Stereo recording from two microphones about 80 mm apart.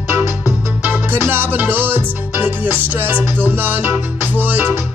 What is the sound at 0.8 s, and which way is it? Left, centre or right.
Music, right.